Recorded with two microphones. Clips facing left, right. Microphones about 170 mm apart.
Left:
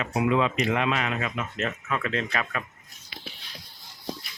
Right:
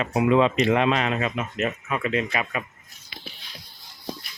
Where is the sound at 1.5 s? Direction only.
15° right (ahead or behind).